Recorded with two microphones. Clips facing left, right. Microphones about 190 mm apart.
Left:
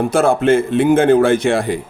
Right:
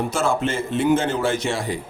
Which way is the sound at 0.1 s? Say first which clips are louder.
Left 9 dB; 55° left (ahead or behind).